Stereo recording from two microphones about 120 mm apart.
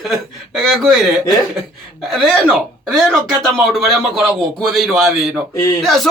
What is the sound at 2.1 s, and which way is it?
Speech, centre (ahead or behind).